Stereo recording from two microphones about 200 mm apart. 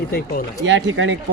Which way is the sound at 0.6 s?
65° right (ahead or behind).